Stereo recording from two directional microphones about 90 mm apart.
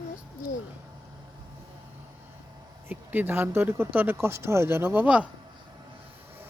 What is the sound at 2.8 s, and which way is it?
Speech, 20° right (ahead or behind).